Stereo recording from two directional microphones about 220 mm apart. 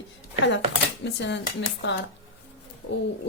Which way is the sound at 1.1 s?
55° left (ahead or behind).